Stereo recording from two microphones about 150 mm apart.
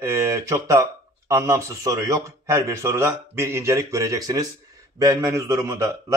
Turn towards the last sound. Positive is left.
turn(degrees=-20)  # may be behind; listen again after turning